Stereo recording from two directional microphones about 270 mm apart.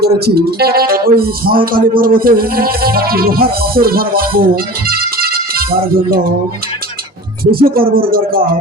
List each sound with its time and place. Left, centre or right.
0.0 s a man's voice: right
7.5 s a man's voice: right